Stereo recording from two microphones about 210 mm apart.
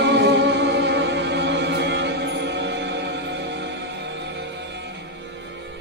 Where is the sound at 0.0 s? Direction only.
55° right (ahead or behind).